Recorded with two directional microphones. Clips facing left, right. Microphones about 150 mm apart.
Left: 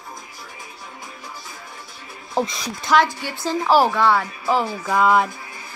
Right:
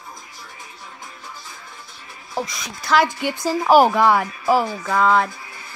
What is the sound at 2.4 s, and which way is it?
Speech, 30° left (ahead or behind).